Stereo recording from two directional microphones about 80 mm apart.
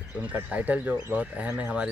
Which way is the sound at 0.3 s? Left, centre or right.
Centre.